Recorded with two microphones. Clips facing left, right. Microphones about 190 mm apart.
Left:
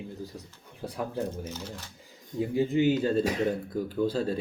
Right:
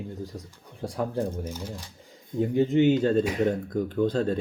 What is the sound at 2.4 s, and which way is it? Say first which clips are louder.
Speech: right 4 dB; 5° left (ahead or behind).